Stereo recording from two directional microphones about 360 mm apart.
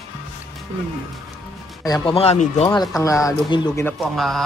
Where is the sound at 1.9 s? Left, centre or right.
Centre.